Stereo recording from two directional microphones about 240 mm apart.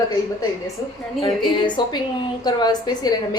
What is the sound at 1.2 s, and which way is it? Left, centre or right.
A woman's voice, centre.